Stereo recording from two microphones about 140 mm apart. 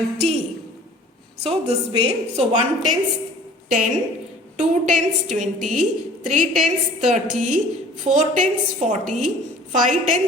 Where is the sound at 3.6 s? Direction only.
65° right (ahead or behind).